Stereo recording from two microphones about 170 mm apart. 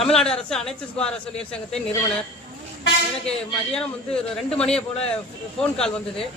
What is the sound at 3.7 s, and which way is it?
A woman's voice, 5° left (ahead or behind).